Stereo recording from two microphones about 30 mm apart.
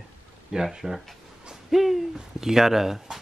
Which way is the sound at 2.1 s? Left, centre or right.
Centre.